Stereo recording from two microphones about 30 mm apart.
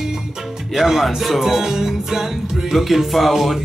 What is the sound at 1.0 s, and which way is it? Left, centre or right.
Speech, centre.